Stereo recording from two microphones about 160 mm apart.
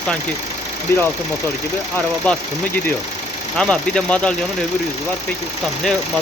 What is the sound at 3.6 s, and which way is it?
Speech, 5° left (ahead or behind).